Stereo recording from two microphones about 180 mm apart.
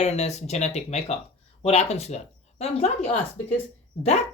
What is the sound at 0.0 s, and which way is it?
Speech, 40° left (ahead or behind).